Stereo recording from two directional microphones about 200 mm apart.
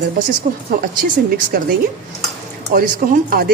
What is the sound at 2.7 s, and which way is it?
Speech, 45° right (ahead or behind).